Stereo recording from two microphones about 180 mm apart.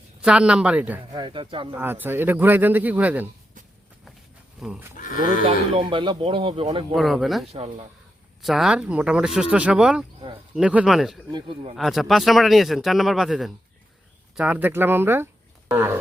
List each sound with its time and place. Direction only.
0.2 s speech: 5° right (ahead or behind)
1.1 s speech: 25° right (ahead or behind)
1.7 s speech: 10° right (ahead or behind)
4.6 s speech: 5° right (ahead or behind)
4.9 s speech: 45° left (ahead or behind)
5.5 s speech: 30° right (ahead or behind)
6.9 s speech: centre (ahead or behind)
7.4 s speech: 35° right (ahead or behind)
8.4 s speech: centre (ahead or behind)
11.3 s speech: 25° right (ahead or behind)
11.8 s speech: centre (ahead or behind)